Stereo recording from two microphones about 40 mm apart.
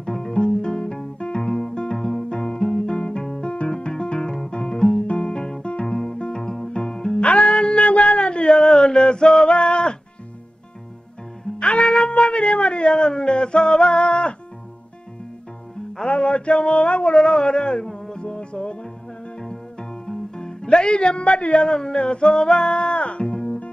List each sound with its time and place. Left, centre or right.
0.0 s music: centre
3.9 s guitar: centre
5.0 s music: left
6.3 s music: centre
7.2 s a sound: left
11.6 s music: left
12.9 s a sound: centre
16.1 s a sound: left
17.2 s speech: centre
18.2 s music: left
18.6 s music: centre